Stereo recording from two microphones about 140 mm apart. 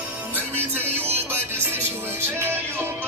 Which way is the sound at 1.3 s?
15° right (ahead or behind).